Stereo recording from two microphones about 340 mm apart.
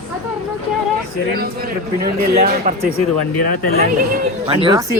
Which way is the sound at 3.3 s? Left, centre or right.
Left.